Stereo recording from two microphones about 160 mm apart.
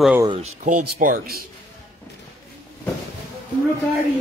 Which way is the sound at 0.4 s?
55° right (ahead or behind).